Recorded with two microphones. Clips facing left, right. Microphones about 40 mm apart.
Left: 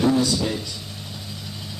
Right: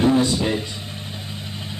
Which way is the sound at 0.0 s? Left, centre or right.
Right.